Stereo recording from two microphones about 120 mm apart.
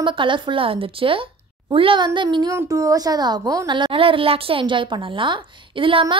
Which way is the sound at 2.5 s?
25° right (ahead or behind).